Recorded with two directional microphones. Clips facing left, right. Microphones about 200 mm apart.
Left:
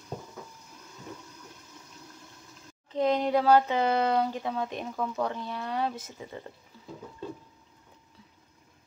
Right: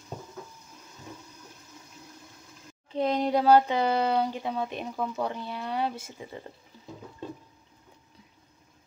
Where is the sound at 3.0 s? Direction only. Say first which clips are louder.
Even; 10° right (ahead or behind).